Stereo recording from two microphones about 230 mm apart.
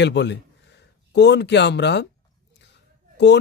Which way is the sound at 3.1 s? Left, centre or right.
Left.